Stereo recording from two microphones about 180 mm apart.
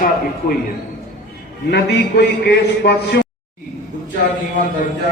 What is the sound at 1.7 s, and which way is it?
A man's voice, 70° left (ahead or behind).